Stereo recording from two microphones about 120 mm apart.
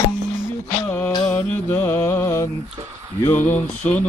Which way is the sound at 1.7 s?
20° left (ahead or behind).